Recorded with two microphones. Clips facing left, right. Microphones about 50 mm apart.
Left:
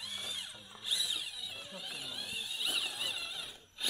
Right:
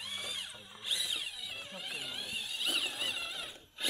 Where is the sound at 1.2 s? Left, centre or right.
Centre.